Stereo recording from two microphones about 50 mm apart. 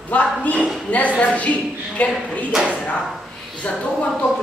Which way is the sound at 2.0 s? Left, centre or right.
Left.